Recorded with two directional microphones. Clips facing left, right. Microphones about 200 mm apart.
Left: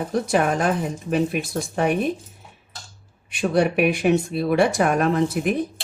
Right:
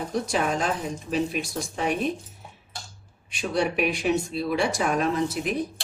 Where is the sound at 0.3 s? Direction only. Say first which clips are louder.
Left 6 dB; 55° left (ahead or behind).